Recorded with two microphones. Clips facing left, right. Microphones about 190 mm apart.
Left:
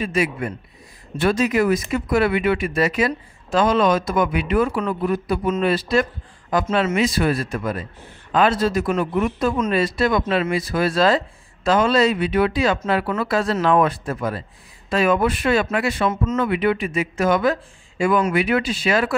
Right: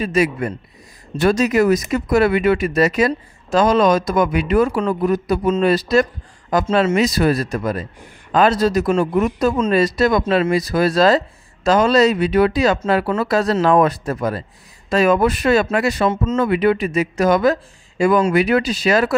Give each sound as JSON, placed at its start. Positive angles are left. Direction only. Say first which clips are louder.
{"t": 0.0, "sound": "speech", "louder": "right 4 dB", "side_deg": -40}